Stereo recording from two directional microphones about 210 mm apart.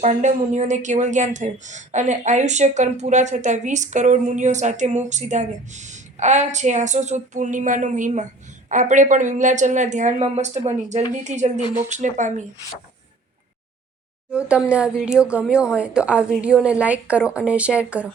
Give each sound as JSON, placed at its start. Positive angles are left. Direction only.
{"t": 0.0, "sound": "speech", "side_deg": -35}
{"t": 14.3, "sound": "a woman's voice", "side_deg": -5}